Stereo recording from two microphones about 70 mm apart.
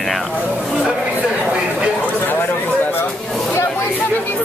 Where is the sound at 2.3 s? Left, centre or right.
Left.